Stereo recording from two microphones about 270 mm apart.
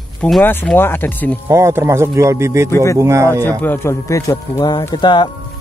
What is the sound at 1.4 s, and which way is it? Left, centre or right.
Speech, centre.